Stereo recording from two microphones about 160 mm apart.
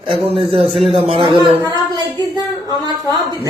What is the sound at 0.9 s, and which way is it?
Speech, 30° right (ahead or behind).